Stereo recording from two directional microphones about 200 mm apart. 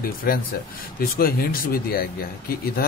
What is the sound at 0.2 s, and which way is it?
Speech, 50° left (ahead or behind).